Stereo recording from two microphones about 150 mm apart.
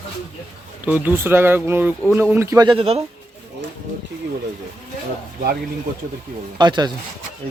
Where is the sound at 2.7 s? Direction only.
40° right (ahead or behind).